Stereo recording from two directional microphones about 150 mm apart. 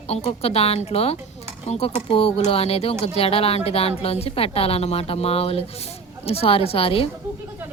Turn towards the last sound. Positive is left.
turn(degrees=40)  # may be behind; listen again after turning